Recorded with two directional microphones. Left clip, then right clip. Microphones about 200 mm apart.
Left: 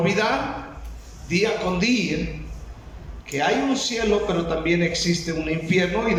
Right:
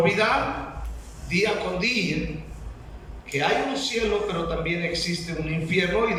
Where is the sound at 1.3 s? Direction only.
35° left (ahead or behind).